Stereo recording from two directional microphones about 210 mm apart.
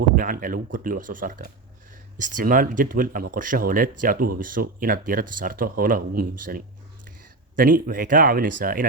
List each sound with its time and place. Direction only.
0.2 s speech: 40° right (ahead or behind)